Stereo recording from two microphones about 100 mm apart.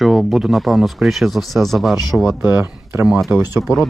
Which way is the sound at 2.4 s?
25° right (ahead or behind).